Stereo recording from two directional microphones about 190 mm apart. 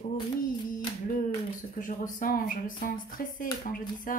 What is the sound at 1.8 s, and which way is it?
Speech, 45° left (ahead or behind).